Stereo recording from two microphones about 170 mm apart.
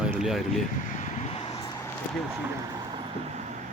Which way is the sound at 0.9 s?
45° left (ahead or behind).